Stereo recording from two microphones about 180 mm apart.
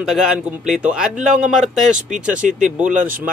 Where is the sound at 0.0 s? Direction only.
5° right (ahead or behind).